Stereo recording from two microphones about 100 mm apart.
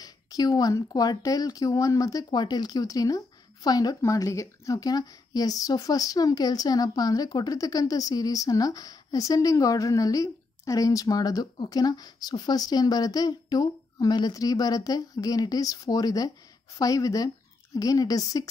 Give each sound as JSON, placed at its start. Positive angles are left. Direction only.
{"t": 0.0, "sound": "a woman's voice", "side_deg": 40}